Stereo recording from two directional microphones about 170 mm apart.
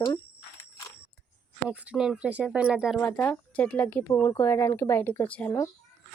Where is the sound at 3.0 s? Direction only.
10° left (ahead or behind).